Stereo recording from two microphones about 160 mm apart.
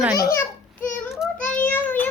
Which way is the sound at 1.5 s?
10° left (ahead or behind).